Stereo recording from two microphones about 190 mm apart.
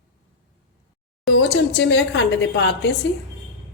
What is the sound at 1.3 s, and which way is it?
A woman's voice, 75° left (ahead or behind).